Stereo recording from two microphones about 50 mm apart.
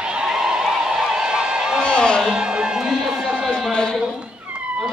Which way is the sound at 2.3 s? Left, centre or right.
Centre.